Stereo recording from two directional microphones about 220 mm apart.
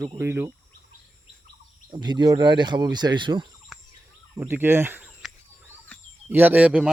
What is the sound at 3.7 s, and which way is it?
Turkey, centre (ahead or behind).